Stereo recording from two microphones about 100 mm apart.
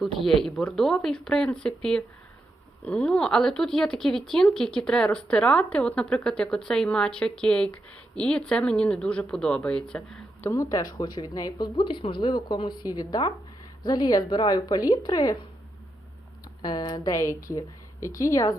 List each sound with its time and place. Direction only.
0.2 s speech: centre (ahead or behind)
10.4 s speech: 30° left (ahead or behind)
16.6 s speech: 45° left (ahead or behind)